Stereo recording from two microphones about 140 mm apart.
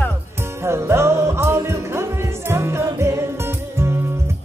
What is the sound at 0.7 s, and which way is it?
Music, 20° right (ahead or behind).